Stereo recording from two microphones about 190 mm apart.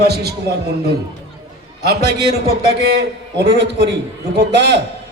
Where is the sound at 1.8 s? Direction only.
55° right (ahead or behind).